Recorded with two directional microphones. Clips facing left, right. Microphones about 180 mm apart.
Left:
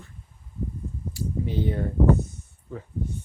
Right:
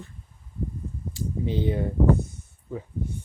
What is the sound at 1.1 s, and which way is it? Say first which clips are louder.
Speech: right 1 dB; 20° right (ahead or behind).